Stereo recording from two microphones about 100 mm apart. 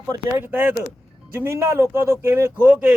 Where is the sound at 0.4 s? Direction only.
20° right (ahead or behind).